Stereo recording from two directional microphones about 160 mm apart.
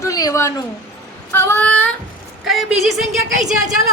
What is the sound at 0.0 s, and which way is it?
Speech, 20° left (ahead or behind).